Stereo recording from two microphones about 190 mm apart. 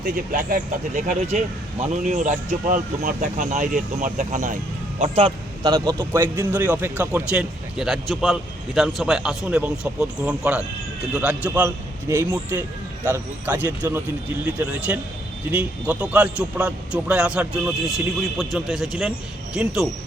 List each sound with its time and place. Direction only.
0.0 s speech: 45° right (ahead or behind)
4.9 s a man's voice: 30° right (ahead or behind); by 19.9 s 5° right (ahead or behind)